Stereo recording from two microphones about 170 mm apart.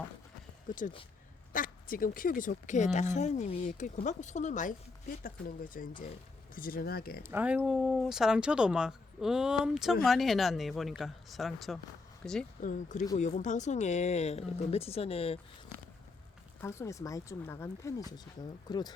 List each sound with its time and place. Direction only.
0.7 s speech: 50° left (ahead or behind)
7.2 s speech: 10° right (ahead or behind); by 12.5 s 5° left (ahead or behind)
12.6 s speech: 45° left (ahead or behind)
16.6 s speech: 15° left (ahead or behind)